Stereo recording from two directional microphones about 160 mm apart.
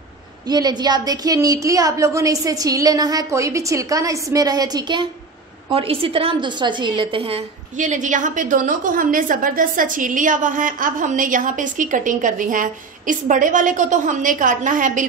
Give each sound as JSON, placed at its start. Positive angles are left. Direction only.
{"t": 0.5, "sound": "a woman's voice", "side_deg": -25}